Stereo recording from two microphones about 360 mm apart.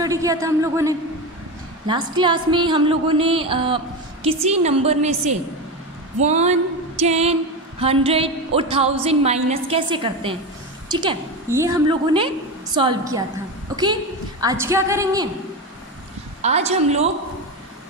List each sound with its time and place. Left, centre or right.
0.0 s a woman's voice: centre
6.2 s music: centre
7.8 s a woman's voice: centre
13.7 s a sound: centre
14.4 s a woman's voice: centre
16.3 s a woman's voice: centre